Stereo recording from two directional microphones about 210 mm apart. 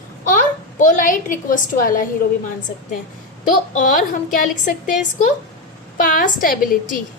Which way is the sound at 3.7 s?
40° left (ahead or behind).